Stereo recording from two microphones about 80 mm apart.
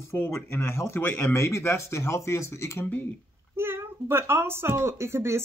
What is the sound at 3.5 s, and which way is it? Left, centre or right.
A child's voice, right.